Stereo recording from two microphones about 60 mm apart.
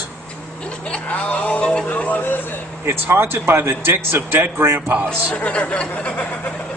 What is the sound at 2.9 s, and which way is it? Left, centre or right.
A man's voice, right.